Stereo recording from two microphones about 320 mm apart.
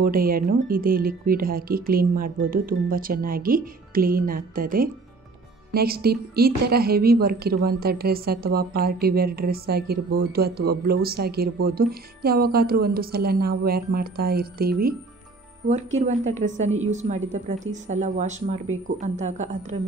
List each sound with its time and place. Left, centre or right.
0.0 s a woman's voice: right
16.1 s a woman's voice: right